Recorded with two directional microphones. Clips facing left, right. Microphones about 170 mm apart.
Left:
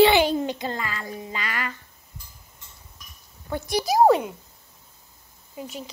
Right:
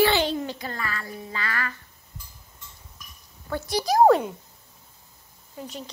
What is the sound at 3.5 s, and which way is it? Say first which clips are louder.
Speech: left 1 dB; 15° left (ahead or behind).